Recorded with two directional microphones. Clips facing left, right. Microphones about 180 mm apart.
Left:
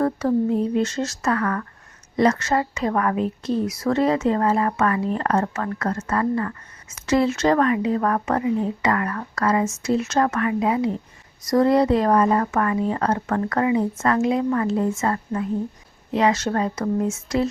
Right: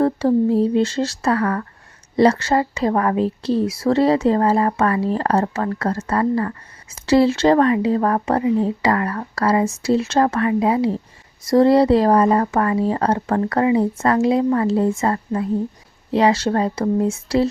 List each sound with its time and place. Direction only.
0.0 s speech: 30° right (ahead or behind)